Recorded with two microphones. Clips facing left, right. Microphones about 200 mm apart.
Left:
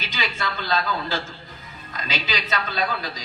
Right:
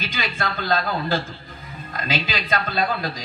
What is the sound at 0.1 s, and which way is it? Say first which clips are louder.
A man's voice: left 2 dB; 55° right (ahead or behind).